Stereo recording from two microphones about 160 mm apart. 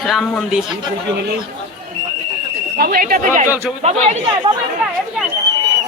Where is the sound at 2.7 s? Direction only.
70° right (ahead or behind); by 3.5 s 55° right (ahead or behind).